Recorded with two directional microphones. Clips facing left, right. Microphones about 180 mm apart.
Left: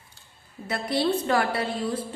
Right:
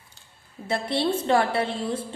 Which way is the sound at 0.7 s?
25° right (ahead or behind).